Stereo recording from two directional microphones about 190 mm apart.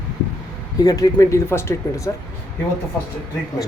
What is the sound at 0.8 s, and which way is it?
Speech, 20° left (ahead or behind).